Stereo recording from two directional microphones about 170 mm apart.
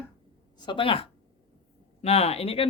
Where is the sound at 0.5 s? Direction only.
25° left (ahead or behind).